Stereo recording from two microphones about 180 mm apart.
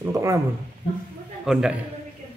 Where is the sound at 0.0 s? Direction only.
15° right (ahead or behind).